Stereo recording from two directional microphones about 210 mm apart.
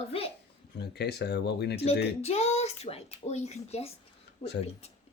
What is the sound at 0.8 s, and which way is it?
Speech, 55° left (ahead or behind).